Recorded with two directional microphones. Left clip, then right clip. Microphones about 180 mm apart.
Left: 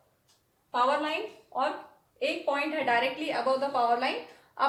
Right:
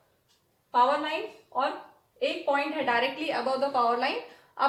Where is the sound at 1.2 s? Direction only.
10° right (ahead or behind).